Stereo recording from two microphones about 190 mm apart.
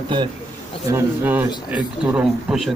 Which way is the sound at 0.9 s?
10° right (ahead or behind).